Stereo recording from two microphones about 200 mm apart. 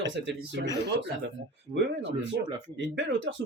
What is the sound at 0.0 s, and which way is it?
Speech, 65° right (ahead or behind).